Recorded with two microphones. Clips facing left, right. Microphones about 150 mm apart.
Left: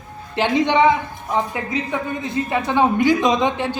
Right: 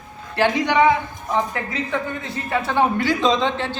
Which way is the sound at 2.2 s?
15° left (ahead or behind).